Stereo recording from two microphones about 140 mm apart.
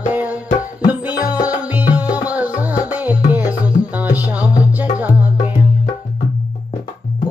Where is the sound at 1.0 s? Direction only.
10° right (ahead or behind).